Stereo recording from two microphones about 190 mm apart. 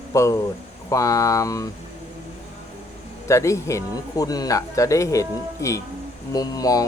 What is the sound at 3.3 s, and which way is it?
A man's voice, 15° left (ahead or behind).